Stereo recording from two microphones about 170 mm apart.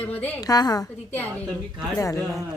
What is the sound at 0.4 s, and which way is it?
Speech, 20° left (ahead or behind).